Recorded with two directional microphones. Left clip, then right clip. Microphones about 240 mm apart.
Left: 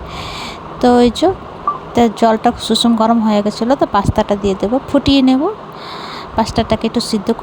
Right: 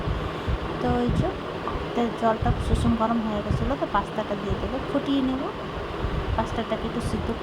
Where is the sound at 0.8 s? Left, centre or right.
Left.